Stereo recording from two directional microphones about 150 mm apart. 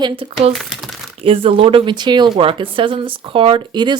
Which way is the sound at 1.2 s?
40° right (ahead or behind).